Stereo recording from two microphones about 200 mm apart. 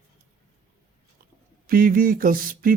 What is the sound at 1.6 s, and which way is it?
Speech, 45° right (ahead or behind).